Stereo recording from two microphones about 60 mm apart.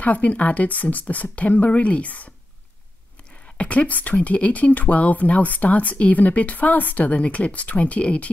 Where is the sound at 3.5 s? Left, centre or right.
Left.